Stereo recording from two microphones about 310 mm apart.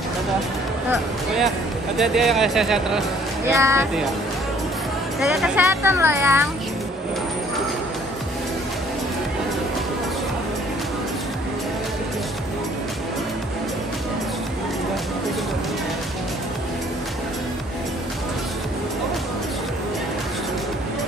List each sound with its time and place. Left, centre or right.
2.0 s speech: centre
5.2 s speech: centre